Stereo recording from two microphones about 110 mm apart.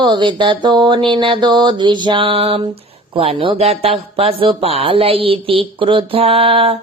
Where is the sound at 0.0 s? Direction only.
45° right (ahead or behind).